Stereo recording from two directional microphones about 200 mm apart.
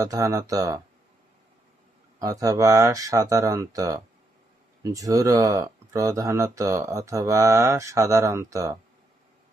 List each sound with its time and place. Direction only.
0.0 s speech: 15° right (ahead or behind)
2.1 s speech: 15° right (ahead or behind)